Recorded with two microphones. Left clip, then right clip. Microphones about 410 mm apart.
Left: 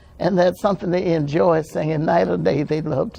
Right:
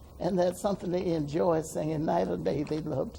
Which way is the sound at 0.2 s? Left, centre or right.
Left.